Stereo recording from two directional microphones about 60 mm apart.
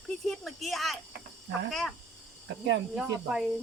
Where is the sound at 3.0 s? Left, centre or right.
Centre.